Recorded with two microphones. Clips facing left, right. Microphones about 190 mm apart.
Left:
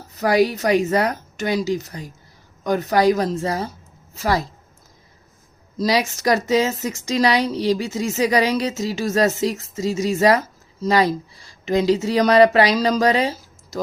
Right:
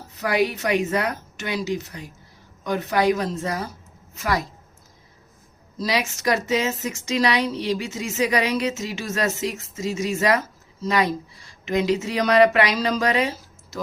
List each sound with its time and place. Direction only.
0.2 s a woman's voice: 35° left (ahead or behind)
5.7 s a woman's voice: 35° left (ahead or behind)